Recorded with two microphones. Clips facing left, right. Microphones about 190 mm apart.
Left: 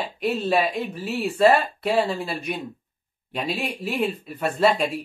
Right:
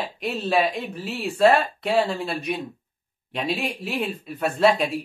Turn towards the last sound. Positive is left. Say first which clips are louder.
# right 1 dB
turn(degrees=0)  # may be behind; listen again after turning